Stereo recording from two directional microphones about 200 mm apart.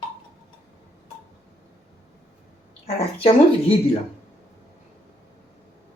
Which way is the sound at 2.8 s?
30° left (ahead or behind).